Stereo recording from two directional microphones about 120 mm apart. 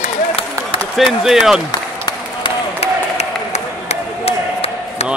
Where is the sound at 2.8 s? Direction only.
65° left (ahead or behind).